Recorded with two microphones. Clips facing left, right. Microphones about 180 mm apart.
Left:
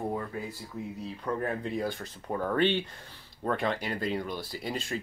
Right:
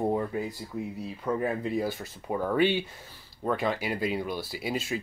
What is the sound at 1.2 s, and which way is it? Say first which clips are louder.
Speech: right 3 dB; 5° right (ahead or behind).